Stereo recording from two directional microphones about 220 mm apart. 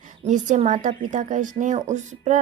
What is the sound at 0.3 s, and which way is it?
Speech, 35° right (ahead or behind).